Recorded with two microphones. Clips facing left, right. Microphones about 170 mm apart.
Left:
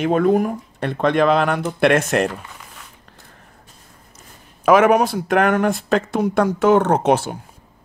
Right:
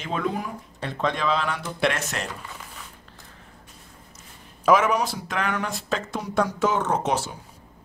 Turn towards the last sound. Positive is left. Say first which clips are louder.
# left 8 dB
turn(degrees=60)  # may be behind; listen again after turning